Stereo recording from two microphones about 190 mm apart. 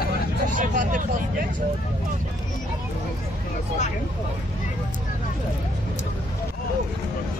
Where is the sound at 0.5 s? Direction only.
45° right (ahead or behind).